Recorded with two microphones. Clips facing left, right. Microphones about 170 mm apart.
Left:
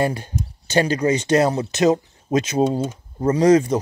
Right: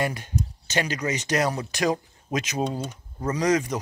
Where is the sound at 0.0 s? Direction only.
30° left (ahead or behind).